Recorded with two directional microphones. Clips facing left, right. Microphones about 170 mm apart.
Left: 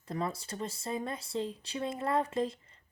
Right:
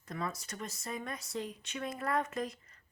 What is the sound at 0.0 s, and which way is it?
Speech, 30° left (ahead or behind).